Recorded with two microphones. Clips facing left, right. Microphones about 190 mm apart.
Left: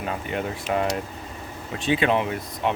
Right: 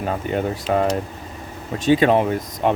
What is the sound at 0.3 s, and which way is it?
Speech, 40° right (ahead or behind).